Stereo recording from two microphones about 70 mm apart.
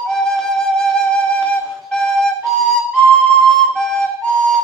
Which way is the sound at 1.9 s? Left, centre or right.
Centre.